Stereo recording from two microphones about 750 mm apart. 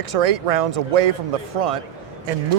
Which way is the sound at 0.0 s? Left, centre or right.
Right.